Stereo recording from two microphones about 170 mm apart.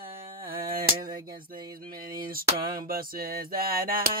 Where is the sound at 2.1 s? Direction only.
60° right (ahead or behind).